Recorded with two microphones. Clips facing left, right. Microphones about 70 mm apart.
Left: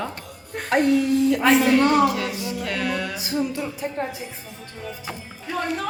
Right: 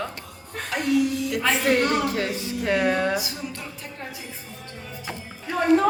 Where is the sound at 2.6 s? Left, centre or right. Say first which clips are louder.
Right 6 dB; right.